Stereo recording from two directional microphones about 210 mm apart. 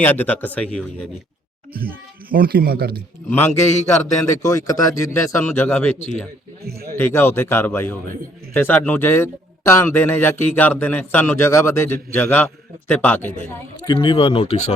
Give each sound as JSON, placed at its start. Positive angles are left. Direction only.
{"t": 0.0, "sound": "a man's voice", "side_deg": 10}
{"t": 2.3, "sound": "speech", "side_deg": -45}
{"t": 3.2, "sound": "a man's voice", "side_deg": 10}
{"t": 6.9, "sound": "a man's voice", "side_deg": 10}
{"t": 13.8, "sound": "speech", "side_deg": 20}